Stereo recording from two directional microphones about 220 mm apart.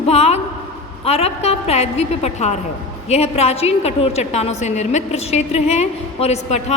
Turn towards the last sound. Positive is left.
turn(degrees=30)  # may be behind; listen again after turning